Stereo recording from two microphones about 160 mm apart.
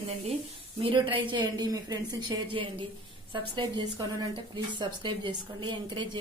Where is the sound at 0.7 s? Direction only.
35° right (ahead or behind).